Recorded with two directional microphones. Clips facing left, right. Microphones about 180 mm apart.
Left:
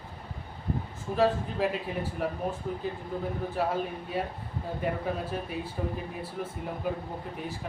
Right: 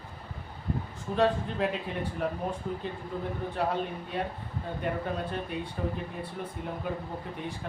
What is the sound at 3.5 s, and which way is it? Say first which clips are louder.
Speech: even; 5° left (ahead or behind).